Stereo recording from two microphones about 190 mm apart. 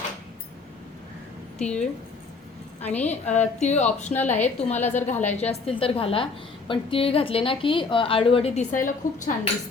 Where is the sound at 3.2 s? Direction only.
35° left (ahead or behind).